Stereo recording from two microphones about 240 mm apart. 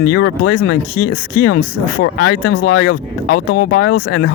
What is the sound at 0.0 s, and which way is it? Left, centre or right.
Speech, left.